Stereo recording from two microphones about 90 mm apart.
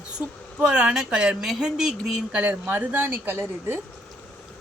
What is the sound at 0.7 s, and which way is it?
Speech, 10° right (ahead or behind).